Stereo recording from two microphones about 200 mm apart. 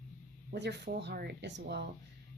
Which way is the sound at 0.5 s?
55° right (ahead or behind).